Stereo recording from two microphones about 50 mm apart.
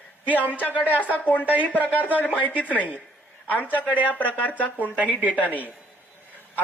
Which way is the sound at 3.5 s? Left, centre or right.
Left.